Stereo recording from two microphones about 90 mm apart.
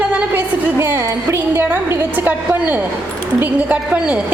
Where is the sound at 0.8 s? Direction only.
30° right (ahead or behind).